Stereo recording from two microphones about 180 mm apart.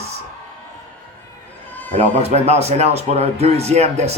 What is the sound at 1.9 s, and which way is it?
Speech, 35° right (ahead or behind).